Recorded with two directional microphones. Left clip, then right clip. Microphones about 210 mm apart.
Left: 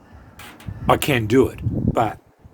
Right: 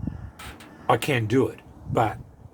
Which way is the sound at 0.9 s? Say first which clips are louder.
Left 4 dB; 50° left (ahead or behind).